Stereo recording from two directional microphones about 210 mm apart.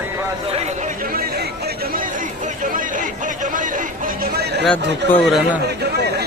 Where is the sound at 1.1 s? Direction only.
45° right (ahead or behind).